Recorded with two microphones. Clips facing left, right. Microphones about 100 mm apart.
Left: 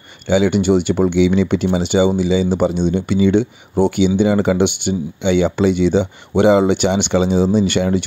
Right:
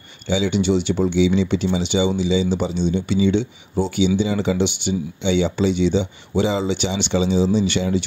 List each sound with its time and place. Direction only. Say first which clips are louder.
0.3 s speech: left 5 dB; 55° left (ahead or behind)